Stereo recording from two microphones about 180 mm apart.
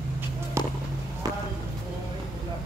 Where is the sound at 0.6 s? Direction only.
15° right (ahead or behind).